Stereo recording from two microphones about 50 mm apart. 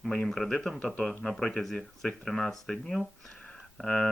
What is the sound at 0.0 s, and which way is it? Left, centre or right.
Speech, centre.